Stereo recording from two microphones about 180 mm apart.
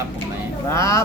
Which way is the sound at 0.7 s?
15° left (ahead or behind).